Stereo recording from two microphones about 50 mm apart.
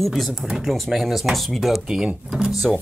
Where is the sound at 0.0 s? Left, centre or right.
Centre.